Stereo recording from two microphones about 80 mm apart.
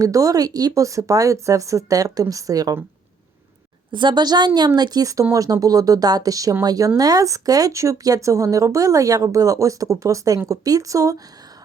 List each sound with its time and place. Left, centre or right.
0.0 s speech: right
3.9 s a woman's voice: right